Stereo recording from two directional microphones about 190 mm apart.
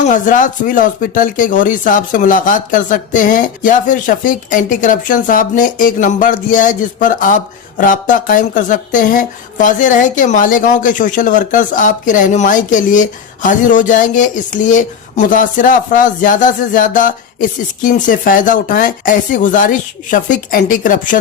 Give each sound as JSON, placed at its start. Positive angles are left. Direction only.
{"t": 0.0, "sound": "speech", "side_deg": 40}